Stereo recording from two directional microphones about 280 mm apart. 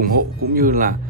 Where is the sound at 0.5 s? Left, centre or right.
Right.